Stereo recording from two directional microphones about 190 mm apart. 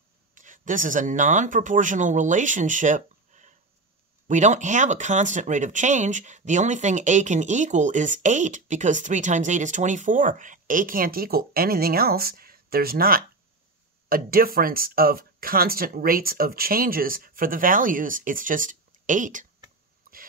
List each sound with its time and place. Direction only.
0.3 s speech: 45° right (ahead or behind)